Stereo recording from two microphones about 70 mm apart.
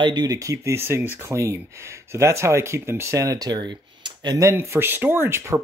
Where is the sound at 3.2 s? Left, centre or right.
Right.